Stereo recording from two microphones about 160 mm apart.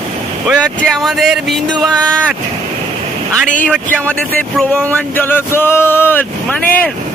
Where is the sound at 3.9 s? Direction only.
5° left (ahead or behind).